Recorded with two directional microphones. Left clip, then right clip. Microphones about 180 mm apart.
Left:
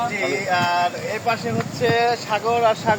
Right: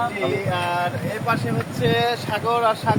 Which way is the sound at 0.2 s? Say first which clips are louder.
Left 3 dB; 20° left (ahead or behind).